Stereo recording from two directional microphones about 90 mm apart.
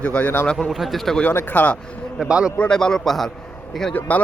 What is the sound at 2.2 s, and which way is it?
Speech, 10° right (ahead or behind).